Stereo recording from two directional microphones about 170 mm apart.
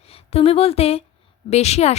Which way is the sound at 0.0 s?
35° left (ahead or behind).